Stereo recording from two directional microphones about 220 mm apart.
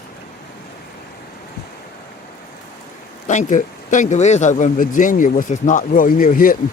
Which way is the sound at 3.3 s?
35° left (ahead or behind).